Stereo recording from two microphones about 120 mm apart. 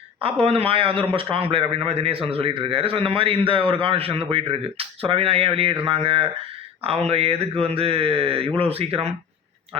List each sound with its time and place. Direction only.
0.2 s a man's voice: 55° right (ahead or behind)